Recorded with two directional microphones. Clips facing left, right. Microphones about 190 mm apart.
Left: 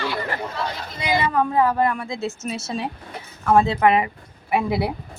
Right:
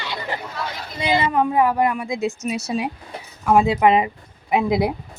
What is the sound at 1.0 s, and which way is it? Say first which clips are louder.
A woman's voice: right 2 dB; 25° right (ahead or behind).